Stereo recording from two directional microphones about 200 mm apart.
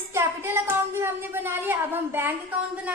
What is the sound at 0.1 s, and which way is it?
Speech, 10° right (ahead or behind).